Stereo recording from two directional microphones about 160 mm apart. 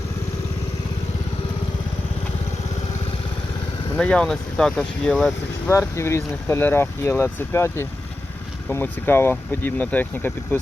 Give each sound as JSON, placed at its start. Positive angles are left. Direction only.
{"t": 3.9, "sound": "speech", "side_deg": 5}
{"t": 5.6, "sound": "speech", "side_deg": 15}